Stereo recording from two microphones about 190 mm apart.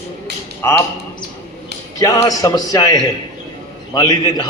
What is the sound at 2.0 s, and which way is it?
Speech, 20° left (ahead or behind).